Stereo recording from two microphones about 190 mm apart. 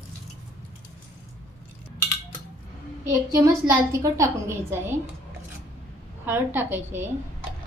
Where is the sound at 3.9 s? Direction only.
15° right (ahead or behind).